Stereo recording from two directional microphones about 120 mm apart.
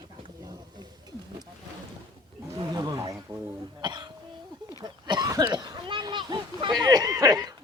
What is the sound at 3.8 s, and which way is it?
Cough, 40° right (ahead or behind).